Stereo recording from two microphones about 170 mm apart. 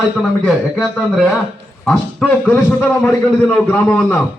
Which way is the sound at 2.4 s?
15° left (ahead or behind).